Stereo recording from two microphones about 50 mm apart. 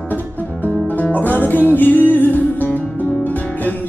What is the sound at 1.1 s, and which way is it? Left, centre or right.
Music, left.